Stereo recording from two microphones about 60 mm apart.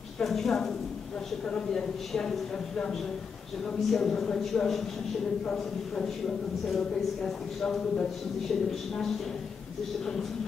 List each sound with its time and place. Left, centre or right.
0.2 s a man's voice: centre
5.4 s a woman's voice: centre